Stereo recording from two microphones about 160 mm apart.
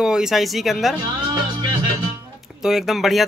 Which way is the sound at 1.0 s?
30° right (ahead or behind).